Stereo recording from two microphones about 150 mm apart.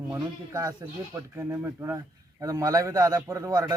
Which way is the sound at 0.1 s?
25° right (ahead or behind).